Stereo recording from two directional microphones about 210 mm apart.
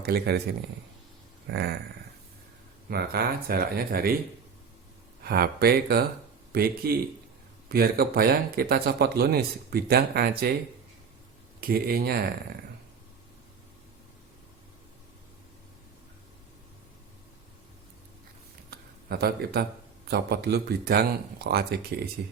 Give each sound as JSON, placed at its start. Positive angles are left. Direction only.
{"t": 0.0, "sound": "speech", "side_deg": -50}
{"t": 1.5, "sound": "speech", "side_deg": -50}
{"t": 2.9, "sound": "speech", "side_deg": -50}
{"t": 5.2, "sound": "speech", "side_deg": -45}
{"t": 11.6, "sound": "speech", "side_deg": -45}
{"t": 18.7, "sound": "a sound", "side_deg": -50}
{"t": 20.1, "sound": "speech", "side_deg": -50}